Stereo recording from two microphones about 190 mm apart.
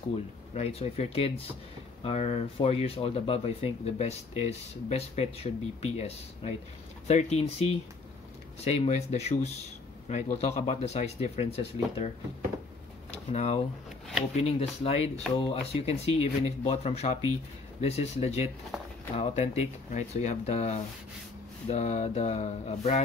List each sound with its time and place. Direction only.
0.6 s speech: 30° left (ahead or behind)
13.3 s speech: 35° left (ahead or behind)
18.7 s a sound: centre (ahead or behind)
19.1 s speech: 35° left (ahead or behind)